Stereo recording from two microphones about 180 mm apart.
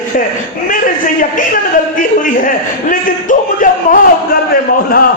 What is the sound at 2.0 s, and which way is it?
A woman's voice, 50° left (ahead or behind).